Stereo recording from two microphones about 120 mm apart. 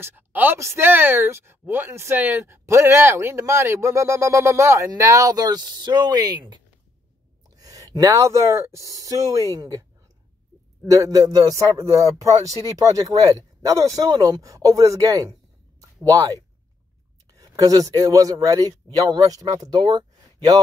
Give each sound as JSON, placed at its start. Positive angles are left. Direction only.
{"t": 0.0, "sound": "speech", "side_deg": -15}
{"t": 7.6, "sound": "speech", "side_deg": -30}
{"t": 10.9, "sound": "speech", "side_deg": -30}